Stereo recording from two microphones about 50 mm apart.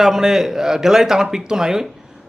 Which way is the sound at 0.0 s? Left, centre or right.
Centre.